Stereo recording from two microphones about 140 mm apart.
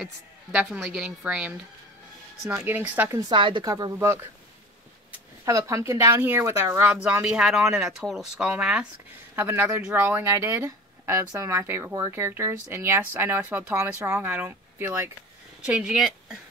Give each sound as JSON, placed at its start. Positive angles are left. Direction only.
{"t": 0.0, "sound": "speech", "side_deg": -5}
{"t": 3.2, "sound": "speech", "side_deg": -35}
{"t": 5.4, "sound": "speech", "side_deg": -25}
{"t": 9.3, "sound": "speech", "side_deg": -15}
{"t": 15.6, "sound": "speech", "side_deg": -5}